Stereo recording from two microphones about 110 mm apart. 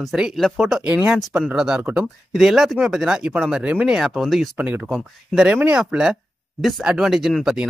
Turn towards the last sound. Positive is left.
turn(degrees=-5)  # may be behind; listen again after turning